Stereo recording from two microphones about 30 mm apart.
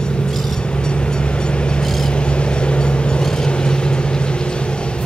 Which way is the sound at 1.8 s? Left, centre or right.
Centre.